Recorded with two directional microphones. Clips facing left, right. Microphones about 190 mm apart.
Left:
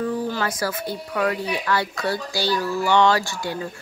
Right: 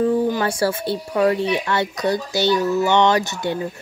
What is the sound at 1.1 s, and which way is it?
Speech, 25° right (ahead or behind).